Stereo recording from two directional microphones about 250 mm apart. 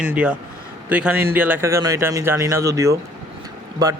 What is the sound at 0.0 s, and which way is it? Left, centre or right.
A man's voice, centre.